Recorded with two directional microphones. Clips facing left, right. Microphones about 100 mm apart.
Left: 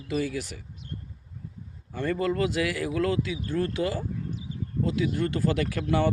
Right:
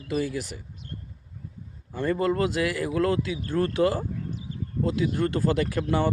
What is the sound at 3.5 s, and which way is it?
Speech, 50° right (ahead or behind).